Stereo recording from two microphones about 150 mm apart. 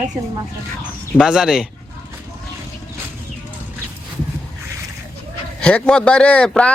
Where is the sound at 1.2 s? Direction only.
5° right (ahead or behind).